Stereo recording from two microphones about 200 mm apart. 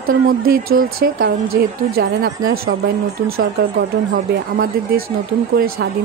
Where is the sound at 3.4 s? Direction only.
45° right (ahead or behind).